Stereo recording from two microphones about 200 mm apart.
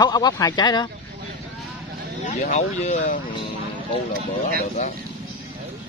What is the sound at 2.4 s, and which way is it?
Speech, 35° left (ahead or behind).